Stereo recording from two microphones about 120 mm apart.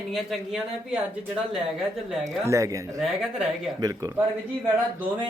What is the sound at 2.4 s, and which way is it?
Speech, 25° right (ahead or behind).